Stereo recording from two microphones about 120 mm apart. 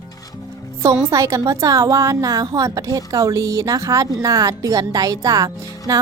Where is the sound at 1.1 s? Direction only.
25° right (ahead or behind).